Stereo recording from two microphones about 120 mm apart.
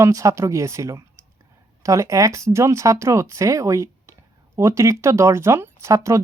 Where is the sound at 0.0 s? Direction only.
25° right (ahead or behind).